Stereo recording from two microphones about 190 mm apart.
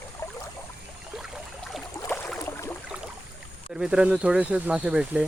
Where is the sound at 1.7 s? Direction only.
Centre (ahead or behind).